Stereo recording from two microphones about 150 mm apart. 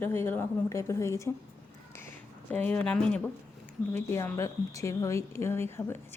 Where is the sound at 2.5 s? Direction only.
10° left (ahead or behind).